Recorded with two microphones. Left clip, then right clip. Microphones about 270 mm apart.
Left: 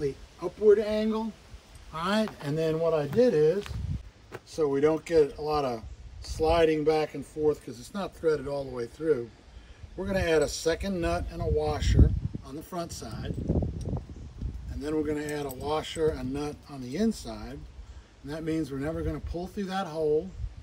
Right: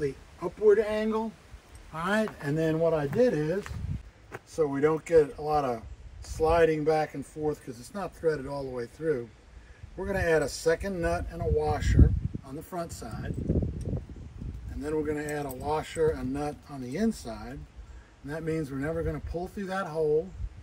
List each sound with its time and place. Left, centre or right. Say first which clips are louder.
0.0 s speech: even; centre